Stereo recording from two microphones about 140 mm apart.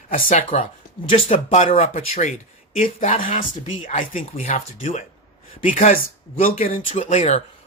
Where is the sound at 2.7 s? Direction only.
75° left (ahead or behind).